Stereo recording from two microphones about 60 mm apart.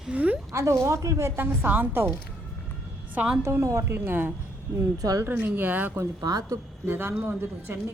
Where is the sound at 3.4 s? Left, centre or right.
Right.